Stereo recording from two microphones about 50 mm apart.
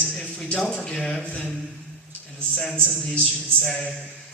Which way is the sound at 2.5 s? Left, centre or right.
Centre.